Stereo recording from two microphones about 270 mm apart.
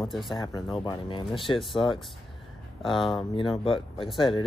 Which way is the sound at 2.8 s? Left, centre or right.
Centre.